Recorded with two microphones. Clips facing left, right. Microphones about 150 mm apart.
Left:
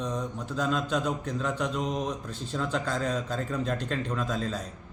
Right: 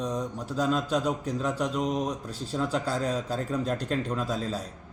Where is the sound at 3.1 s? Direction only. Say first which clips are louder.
Right 1 dB; 35° right (ahead or behind).